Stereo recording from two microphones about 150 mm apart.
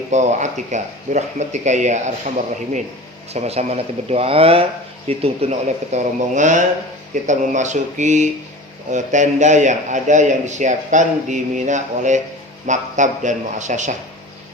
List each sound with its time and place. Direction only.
0.1 s a man's voice: 50° right (ahead or behind)
3.3 s a man's voice: 45° right (ahead or behind)